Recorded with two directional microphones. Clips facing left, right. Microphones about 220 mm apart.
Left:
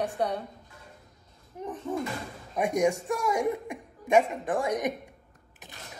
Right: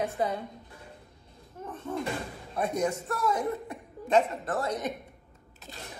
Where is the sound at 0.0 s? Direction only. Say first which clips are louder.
Even; centre (ahead or behind).